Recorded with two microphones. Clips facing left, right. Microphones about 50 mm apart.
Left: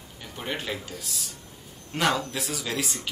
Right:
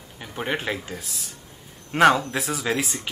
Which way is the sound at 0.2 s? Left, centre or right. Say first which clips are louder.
Right 6 dB; right.